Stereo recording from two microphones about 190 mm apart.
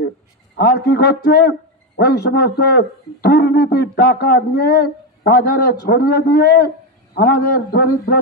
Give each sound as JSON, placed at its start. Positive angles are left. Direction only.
{"t": 0.6, "sound": "a man's voice", "side_deg": 55}